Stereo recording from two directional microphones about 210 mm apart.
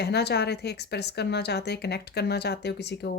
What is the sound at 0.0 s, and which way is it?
Speech, 50° left (ahead or behind).